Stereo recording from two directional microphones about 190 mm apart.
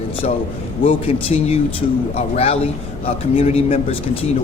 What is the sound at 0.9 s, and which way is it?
Speech, 30° left (ahead or behind).